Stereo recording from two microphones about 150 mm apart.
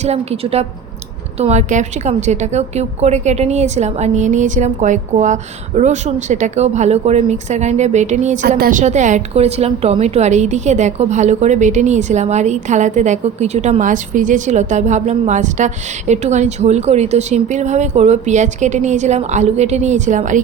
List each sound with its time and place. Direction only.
0.0 s a woman's voice: 45° right (ahead or behind)
8.4 s a woman's voice: 85° right
8.8 s a woman's voice: 50° right (ahead or behind)